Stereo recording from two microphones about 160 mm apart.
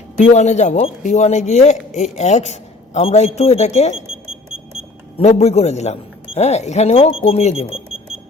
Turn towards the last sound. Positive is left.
turn(degrees=40)  # may be behind; listen again after turning